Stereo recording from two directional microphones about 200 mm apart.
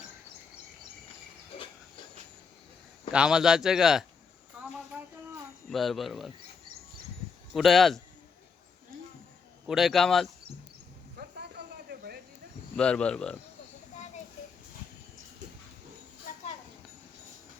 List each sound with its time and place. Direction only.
3.1 s speech: 5° right (ahead or behind)
4.6 s cricket: 5° right (ahead or behind)
5.6 s speech: centre (ahead or behind)
7.5 s speech: centre (ahead or behind)
9.6 s speech: centre (ahead or behind)
11.2 s a sound: 50° right (ahead or behind)
12.7 s speech: 5° left (ahead or behind)